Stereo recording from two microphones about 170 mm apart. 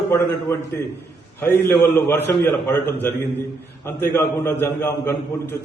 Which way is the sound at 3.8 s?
15° left (ahead or behind).